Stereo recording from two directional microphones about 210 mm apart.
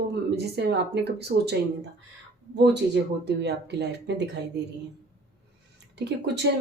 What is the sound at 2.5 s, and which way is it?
Speech, 50° right (ahead or behind).